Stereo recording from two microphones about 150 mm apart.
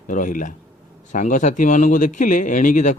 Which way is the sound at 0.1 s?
60° left (ahead or behind).